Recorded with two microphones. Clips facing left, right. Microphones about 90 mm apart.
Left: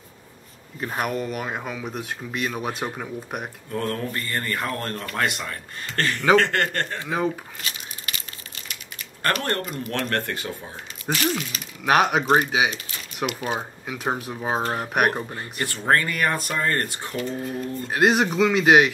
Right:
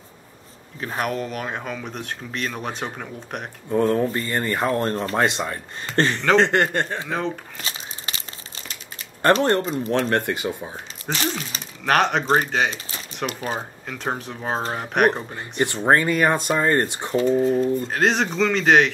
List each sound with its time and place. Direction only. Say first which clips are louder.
0.7 s speech: right 1 dB; 5° left (ahead or behind)
3.7 s speech: right 8 dB; 20° right (ahead or behind)
7.1 s speech: left 1 dB; 5° left (ahead or behind)
7.6 s crumpling: right 2 dB; 30° right (ahead or behind)
8.6 s speech: even; 30° right (ahead or behind)
11.1 s speech: left 1 dB; 5° left (ahead or behind)
15.5 s speech: right 4 dB; 25° right (ahead or behind)
17.8 s speech: left 1 dB; 10° left (ahead or behind)